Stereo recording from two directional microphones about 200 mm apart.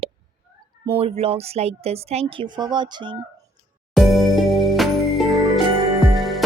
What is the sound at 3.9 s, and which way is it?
Music, centre (ahead or behind).